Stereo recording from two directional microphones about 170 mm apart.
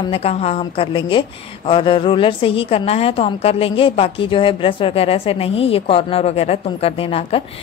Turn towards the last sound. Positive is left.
turn(degrees=35)  # may be behind; listen again after turning